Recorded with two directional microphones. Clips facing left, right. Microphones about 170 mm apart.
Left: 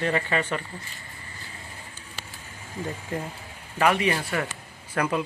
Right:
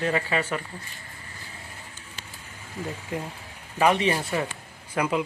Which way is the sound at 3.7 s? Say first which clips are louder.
Right 1 dB; 20° right (ahead or behind).